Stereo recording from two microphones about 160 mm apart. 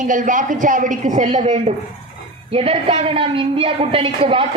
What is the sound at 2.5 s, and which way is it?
A woman's voice, 35° right (ahead or behind).